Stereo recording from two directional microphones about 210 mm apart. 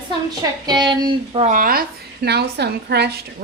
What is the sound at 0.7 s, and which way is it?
Speech, 20° right (ahead or behind).